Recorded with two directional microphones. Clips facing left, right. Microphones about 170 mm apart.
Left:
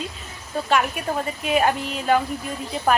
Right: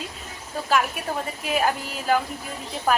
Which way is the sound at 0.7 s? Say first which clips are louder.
Left 1 dB; centre (ahead or behind).